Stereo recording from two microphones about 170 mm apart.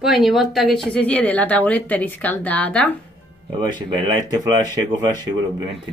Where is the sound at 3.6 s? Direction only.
25° right (ahead or behind).